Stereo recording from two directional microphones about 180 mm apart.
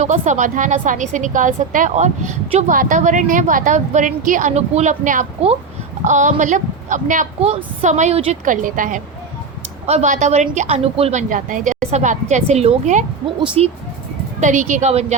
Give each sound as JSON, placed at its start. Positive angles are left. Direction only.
{"t": 0.0, "sound": "a woman's voice", "side_deg": -40}